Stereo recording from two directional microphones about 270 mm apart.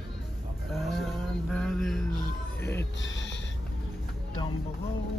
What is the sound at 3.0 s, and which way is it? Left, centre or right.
Speech, left.